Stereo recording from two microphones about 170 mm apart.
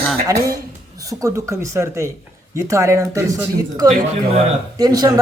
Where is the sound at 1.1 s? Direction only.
20° right (ahead or behind).